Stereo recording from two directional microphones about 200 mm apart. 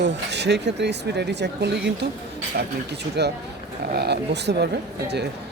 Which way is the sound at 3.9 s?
55° right (ahead or behind).